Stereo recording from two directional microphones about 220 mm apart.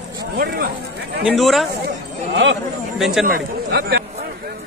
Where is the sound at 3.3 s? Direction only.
50° right (ahead or behind).